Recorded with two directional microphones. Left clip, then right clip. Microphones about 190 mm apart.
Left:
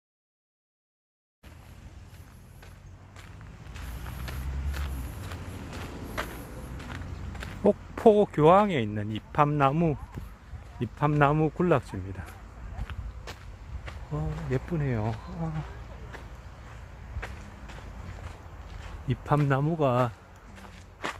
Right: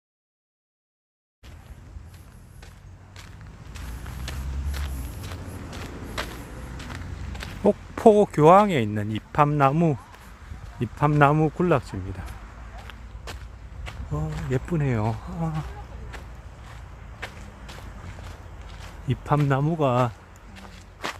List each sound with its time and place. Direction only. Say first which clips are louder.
4.3 s walk: right 5 dB; 5° right (ahead or behind)
6.7 s speech: right 4 dB; 5° right (ahead or behind)
13.3 s walk: right 4 dB; 10° right (ahead or behind)
13.8 s a sound: right 3 dB; 10° right (ahead or behind)
14.7 s speech: right 5 dB; 20° right (ahead or behind)
17.2 s walk: right 4 dB; centre (ahead or behind)
19.0 s speech: right 3 dB; 5° right (ahead or behind)
21.0 s walk: right 2 dB; centre (ahead or behind)